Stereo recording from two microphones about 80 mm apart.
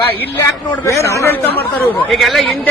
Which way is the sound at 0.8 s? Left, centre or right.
Left.